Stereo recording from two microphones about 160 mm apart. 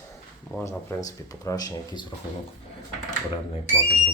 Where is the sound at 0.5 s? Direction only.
15° left (ahead or behind).